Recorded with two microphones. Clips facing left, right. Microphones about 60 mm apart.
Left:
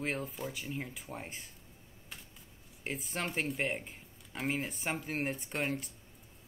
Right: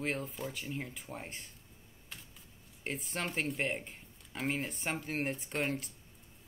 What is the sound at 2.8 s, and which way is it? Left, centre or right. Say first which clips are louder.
Speech: even; centre.